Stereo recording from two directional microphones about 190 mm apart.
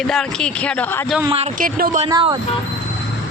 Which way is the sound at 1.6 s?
45° right (ahead or behind).